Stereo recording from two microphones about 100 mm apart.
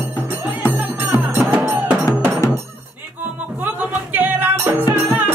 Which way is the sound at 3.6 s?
20° right (ahead or behind).